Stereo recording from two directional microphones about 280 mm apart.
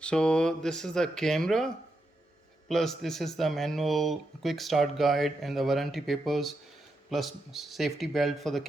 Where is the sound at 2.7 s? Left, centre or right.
Centre.